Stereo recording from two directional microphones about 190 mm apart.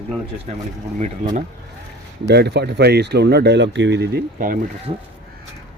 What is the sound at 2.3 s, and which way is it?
Speech, 60° right (ahead or behind).